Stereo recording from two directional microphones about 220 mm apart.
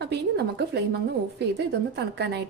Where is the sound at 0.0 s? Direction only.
50° right (ahead or behind).